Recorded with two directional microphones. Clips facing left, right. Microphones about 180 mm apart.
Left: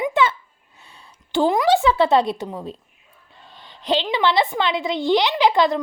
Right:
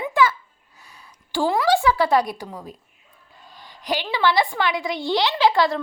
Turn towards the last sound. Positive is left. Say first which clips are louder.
# left 1 dB
turn(degrees=20)  # may be behind; listen again after turning